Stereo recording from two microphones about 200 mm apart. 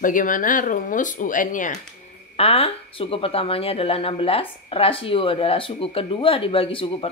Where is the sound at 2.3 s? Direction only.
30° left (ahead or behind).